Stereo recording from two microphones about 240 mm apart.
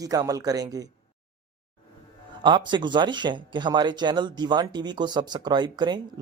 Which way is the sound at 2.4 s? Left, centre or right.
Centre.